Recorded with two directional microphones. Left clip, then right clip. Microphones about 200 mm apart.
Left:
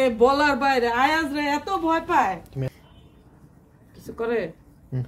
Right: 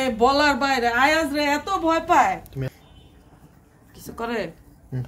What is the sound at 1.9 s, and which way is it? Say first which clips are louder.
Speech: right 3 dB; 35° right (ahead or behind).